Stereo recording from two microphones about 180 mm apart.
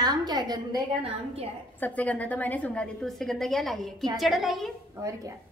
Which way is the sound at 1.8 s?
10° left (ahead or behind).